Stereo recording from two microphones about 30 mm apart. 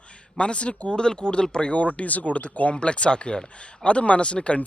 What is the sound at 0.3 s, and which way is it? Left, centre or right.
Speech, left.